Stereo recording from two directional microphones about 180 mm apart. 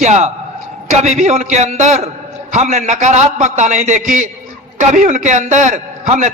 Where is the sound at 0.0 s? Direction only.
40° right (ahead or behind).